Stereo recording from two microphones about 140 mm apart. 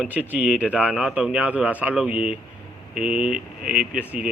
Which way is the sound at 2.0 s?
45° left (ahead or behind).